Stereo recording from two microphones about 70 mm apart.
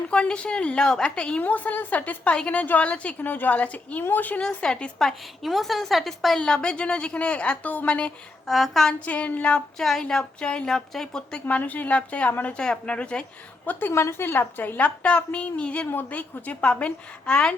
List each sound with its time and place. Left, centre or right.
0.1 s a woman's voice: centre
1.4 s a woman's voice: left
4.4 s a woman's voice: centre
8.4 s a woman's voice: centre
9.0 s a woman's voice: left
11.4 s a woman's voice: left
13.7 s a woman's voice: left
13.9 s a woman's voice: left; by 17.5 s centre